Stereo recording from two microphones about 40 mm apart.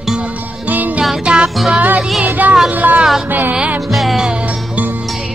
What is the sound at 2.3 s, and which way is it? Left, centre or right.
Music, right.